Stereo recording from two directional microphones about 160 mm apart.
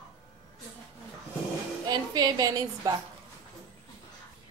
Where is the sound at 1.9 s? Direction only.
25° right (ahead or behind).